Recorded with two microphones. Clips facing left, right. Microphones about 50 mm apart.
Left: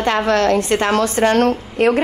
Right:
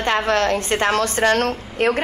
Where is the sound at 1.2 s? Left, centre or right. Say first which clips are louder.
Left 4 dB; left.